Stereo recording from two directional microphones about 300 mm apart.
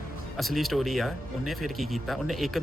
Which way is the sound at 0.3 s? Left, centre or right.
Centre.